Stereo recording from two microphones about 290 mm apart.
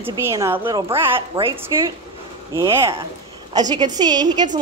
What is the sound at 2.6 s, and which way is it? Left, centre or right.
A woman's voice, centre.